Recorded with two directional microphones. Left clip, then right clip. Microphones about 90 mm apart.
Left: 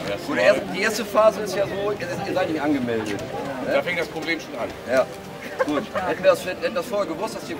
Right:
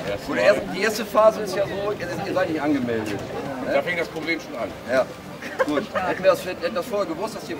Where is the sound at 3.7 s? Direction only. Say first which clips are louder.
Even; 5° left (ahead or behind).